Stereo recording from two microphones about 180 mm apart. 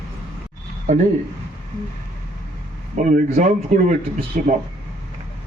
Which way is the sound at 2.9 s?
45° right (ahead or behind).